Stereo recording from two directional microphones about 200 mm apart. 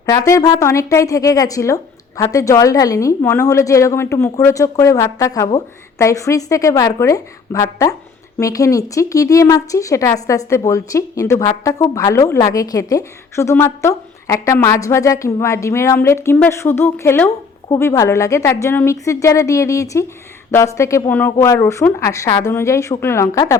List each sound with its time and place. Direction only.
0.0 s speech: 15° left (ahead or behind)